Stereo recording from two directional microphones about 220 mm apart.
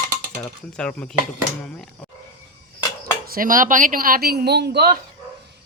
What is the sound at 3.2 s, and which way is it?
Speech, 40° right (ahead or behind).